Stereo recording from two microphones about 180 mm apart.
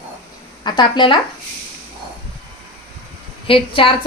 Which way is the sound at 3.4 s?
30° left (ahead or behind).